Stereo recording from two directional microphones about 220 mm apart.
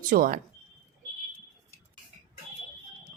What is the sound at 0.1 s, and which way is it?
Speech, 40° right (ahead or behind).